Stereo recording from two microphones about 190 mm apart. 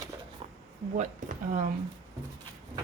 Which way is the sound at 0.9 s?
45° right (ahead or behind).